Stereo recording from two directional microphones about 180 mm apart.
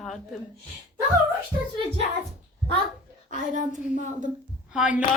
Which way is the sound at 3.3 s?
45° right (ahead or behind).